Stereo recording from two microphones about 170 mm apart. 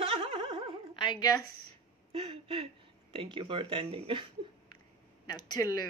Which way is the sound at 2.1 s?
30° right (ahead or behind).